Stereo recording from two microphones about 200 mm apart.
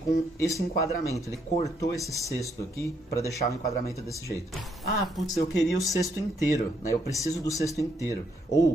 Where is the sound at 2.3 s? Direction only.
15° left (ahead or behind).